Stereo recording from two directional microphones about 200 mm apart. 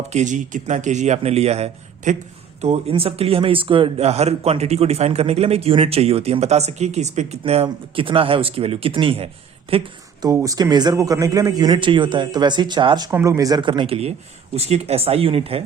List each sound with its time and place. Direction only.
0.1 s a man's voice: 35° right (ahead or behind)